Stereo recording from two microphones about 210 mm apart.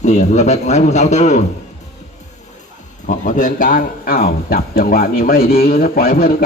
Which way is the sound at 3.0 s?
40° left (ahead or behind).